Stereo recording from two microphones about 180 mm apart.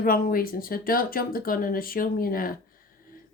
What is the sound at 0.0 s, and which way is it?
Speech, 55° left (ahead or behind).